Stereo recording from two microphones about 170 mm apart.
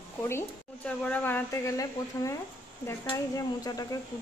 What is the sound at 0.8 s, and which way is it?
Speech, 10° left (ahead or behind).